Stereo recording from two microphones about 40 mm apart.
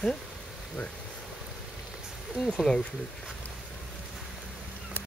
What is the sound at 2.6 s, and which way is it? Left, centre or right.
Speech, centre.